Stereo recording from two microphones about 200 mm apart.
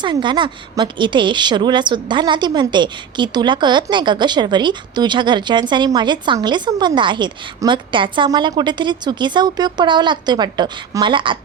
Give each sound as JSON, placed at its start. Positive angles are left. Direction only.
{"t": 0.0, "sound": "a woman's voice", "side_deg": -25}